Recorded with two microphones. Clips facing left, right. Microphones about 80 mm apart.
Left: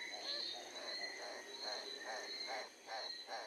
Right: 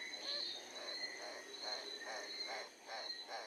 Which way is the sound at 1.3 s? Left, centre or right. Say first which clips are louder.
Left 1 dB; left.